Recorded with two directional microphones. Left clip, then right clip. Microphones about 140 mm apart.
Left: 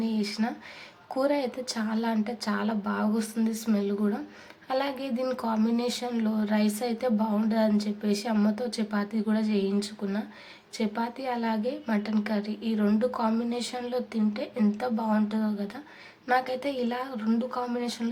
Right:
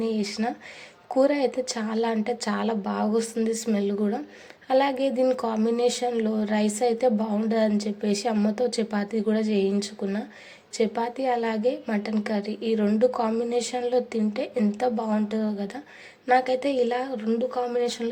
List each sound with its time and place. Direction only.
0.0 s speech: 25° right (ahead or behind)